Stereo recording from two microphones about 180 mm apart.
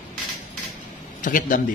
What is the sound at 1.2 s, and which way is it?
Speech, 50° left (ahead or behind).